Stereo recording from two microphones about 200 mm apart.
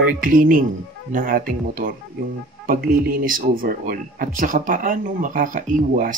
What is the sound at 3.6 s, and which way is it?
Speech, 45° right (ahead or behind).